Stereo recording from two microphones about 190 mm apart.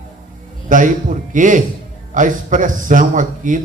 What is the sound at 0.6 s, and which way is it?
A man's voice, 45° right (ahead or behind).